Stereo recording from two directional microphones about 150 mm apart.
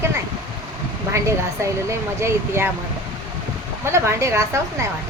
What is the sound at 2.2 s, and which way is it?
Speech, 15° right (ahead or behind).